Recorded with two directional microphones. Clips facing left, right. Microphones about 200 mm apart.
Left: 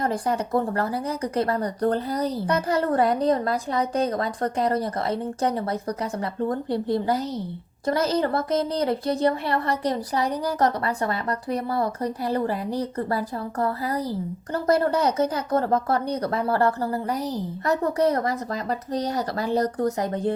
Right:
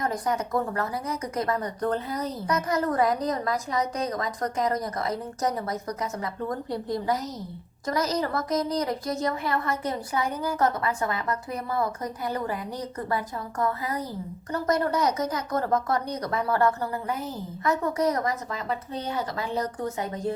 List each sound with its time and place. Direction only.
0.0 s speech: 30° left (ahead or behind)